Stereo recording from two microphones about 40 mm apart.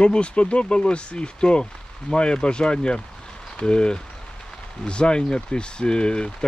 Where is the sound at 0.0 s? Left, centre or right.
Left.